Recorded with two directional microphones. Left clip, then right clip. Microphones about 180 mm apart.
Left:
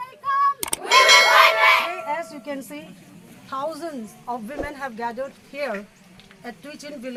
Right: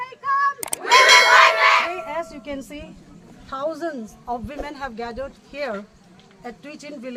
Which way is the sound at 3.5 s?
25° right (ahead or behind).